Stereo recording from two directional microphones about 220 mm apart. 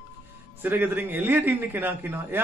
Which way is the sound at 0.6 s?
10° right (ahead or behind).